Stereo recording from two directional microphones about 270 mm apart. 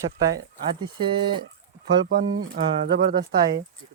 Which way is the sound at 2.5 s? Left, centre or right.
Right.